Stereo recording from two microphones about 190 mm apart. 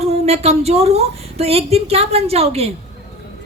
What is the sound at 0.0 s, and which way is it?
A woman's voice, 35° right (ahead or behind).